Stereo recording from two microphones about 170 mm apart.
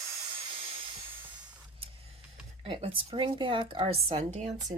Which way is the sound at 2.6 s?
30° right (ahead or behind).